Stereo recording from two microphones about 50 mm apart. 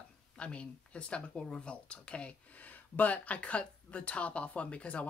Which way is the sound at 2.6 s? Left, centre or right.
Left.